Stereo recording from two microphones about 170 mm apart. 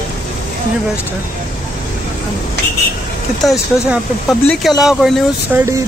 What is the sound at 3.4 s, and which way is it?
Speech, centre (ahead or behind).